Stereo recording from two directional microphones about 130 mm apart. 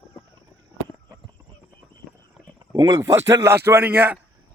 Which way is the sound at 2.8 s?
30° right (ahead or behind).